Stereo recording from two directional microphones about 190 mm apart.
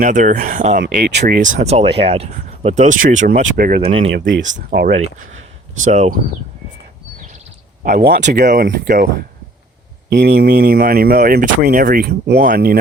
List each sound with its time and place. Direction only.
0.0 s speech: 40° right (ahead or behind); by 1.4 s 60° right (ahead or behind)
1.5 s speech: 35° right (ahead or behind)
3.8 s speech: 30° right (ahead or behind)
4.7 s speech: 70° right (ahead or behind)
5.8 s speech: 40° right (ahead or behind)
7.9 s speech: 45° right (ahead or behind)
10.1 s speech: 60° right (ahead or behind)